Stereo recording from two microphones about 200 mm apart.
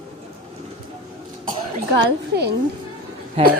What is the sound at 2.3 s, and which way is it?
Speech, 55° right (ahead or behind).